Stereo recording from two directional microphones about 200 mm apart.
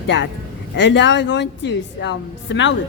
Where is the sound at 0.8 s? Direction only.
60° left (ahead or behind).